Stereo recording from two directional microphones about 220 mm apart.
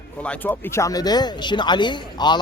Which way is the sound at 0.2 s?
5° left (ahead or behind).